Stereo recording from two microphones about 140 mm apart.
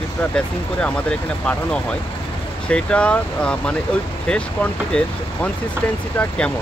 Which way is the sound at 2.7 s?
10° left (ahead or behind).